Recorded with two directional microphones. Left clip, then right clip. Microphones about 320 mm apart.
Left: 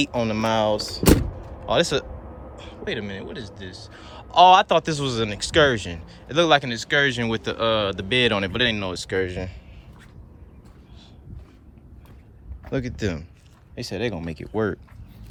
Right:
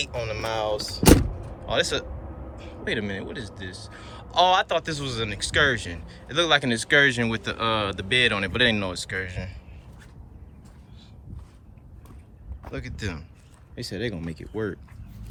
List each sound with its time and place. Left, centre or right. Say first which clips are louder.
0.0 s a man's voice: left 6 dB; centre
12.7 s a man's voice: left 7 dB; centre